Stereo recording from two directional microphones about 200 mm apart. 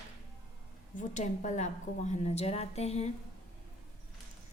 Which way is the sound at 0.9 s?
40° left (ahead or behind).